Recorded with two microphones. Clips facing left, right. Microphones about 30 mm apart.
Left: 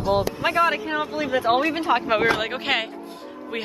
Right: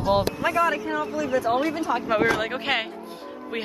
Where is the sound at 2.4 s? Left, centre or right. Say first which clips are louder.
Left 1 dB; centre.